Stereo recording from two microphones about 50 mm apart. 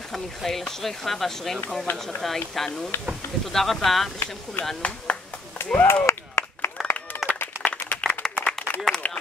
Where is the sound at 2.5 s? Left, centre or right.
Centre.